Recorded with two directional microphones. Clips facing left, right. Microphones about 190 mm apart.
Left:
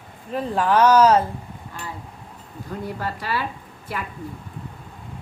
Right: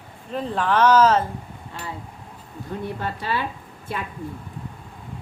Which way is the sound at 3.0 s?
20° right (ahead or behind).